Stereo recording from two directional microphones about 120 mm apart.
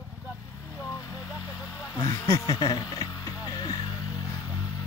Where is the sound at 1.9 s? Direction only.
30° left (ahead or behind).